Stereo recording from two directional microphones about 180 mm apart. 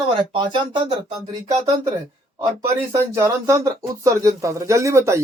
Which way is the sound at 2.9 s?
15° right (ahead or behind).